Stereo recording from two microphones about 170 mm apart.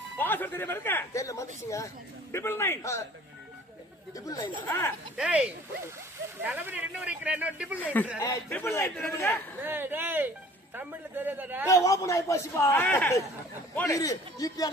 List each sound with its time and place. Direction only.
0.2 s a man's voice: 10° left (ahead or behind)
4.3 s a man's voice: 15° left (ahead or behind)
5.1 s speech: 5° right (ahead or behind)
7.8 s a man's voice: 10° left (ahead or behind)
9.6 s speech: 10° right (ahead or behind)
11.7 s a man's voice: 20° left (ahead or behind)